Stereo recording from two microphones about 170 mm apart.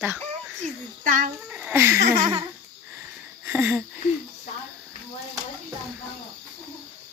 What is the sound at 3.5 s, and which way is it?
Speech, 10° right (ahead or behind).